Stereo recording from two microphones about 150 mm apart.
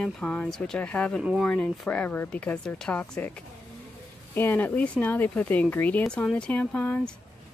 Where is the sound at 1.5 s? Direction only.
10° left (ahead or behind).